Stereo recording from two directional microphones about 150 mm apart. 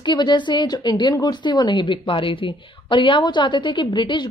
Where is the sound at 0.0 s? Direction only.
30° left (ahead or behind).